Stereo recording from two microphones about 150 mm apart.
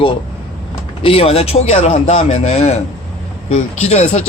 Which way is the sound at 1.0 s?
40° left (ahead or behind).